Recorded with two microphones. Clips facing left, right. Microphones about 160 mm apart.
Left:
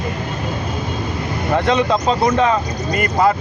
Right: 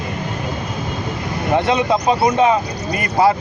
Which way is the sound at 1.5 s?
15° right (ahead or behind).